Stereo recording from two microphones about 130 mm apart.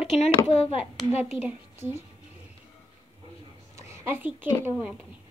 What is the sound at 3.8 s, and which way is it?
Speech, 20° right (ahead or behind).